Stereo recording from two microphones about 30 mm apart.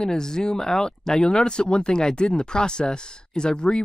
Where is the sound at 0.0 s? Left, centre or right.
Left.